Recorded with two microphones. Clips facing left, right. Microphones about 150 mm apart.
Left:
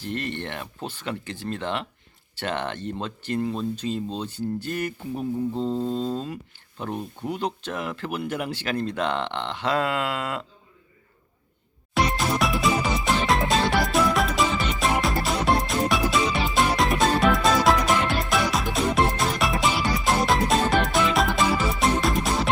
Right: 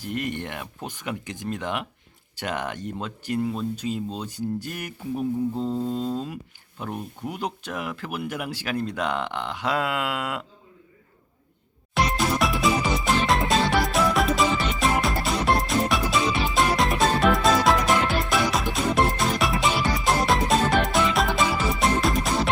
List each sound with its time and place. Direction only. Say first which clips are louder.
0.0 s speech: right 1 dB; 10° right (ahead or behind)
11.9 s music: even; centre (ahead or behind)